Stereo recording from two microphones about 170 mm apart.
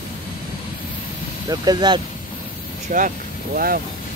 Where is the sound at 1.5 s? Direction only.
25° right (ahead or behind).